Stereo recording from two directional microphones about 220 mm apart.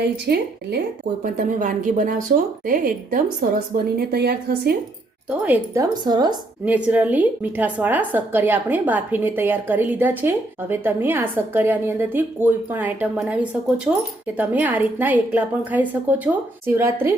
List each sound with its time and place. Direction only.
0.3 s speech: 45° right (ahead or behind)
1.2 s speech: 35° right (ahead or behind)
5.4 s a woman's voice: 10° right (ahead or behind)
6.7 s a woman's voice: 5° right (ahead or behind)